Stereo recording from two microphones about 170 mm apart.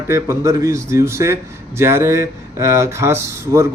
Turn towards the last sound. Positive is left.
turn(degrees=-15)  # may be behind; listen again after turning